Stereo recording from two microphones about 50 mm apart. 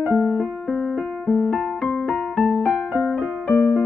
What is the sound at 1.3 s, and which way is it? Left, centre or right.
Keyboard, left.